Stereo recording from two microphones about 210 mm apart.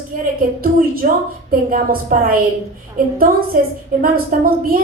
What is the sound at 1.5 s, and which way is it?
A woman's voice, 45° right (ahead or behind).